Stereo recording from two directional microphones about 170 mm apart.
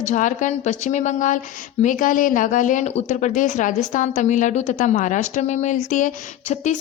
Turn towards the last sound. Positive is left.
turn(degrees=45)  # may be behind; listen again after turning